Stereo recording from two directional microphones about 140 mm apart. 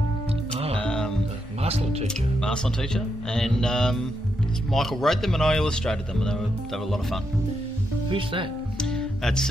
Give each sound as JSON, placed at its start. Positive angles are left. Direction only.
{"t": 0.7, "sound": "music", "side_deg": 5}
{"t": 1.6, "sound": "speech", "side_deg": -45}
{"t": 2.4, "sound": "speech", "side_deg": 5}
{"t": 8.1, "sound": "speech", "side_deg": -40}
{"t": 8.7, "sound": "music", "side_deg": 5}